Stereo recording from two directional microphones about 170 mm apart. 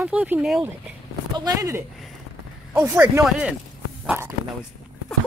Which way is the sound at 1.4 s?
20° right (ahead or behind).